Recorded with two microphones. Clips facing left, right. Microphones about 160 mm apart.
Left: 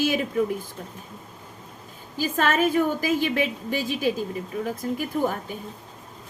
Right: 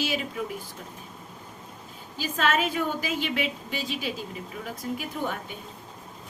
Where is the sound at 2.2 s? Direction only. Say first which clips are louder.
Left 4 dB; 45° left (ahead or behind).